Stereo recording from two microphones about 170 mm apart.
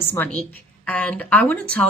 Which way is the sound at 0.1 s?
10° left (ahead or behind).